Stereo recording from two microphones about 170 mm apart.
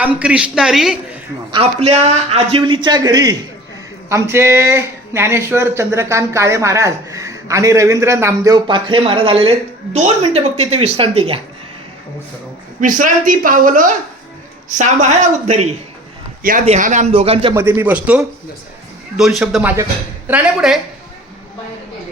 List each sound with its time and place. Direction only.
0.0 s a man's voice: 5° right (ahead or behind)
1.5 s a man's voice: 35° right (ahead or behind)
12.8 s speech: 50° right (ahead or behind)
16.4 s a man's voice: 55° right (ahead or behind); by 17.5 s 35° right (ahead or behind)
17.5 s a man's voice: 15° right (ahead or behind)